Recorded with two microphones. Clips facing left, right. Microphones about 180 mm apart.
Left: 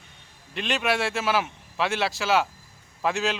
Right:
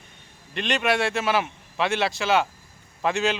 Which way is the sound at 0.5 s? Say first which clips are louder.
Right 2 dB; centre (ahead or behind).